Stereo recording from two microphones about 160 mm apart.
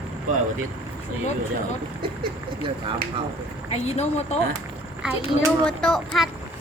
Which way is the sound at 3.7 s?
40° left (ahead or behind).